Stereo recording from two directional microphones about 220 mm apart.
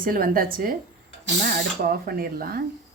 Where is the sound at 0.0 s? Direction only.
40° right (ahead or behind).